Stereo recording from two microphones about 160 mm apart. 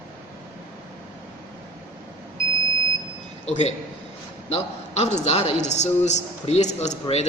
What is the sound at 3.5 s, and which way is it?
A woman's voice, 45° left (ahead or behind).